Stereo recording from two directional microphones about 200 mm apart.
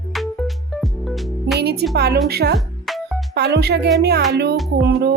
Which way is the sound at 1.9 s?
55° right (ahead or behind).